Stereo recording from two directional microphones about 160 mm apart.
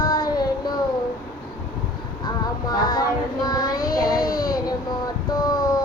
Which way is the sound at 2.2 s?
25° left (ahead or behind).